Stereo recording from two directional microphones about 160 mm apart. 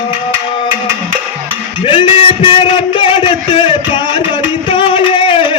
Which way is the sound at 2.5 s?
30° left (ahead or behind).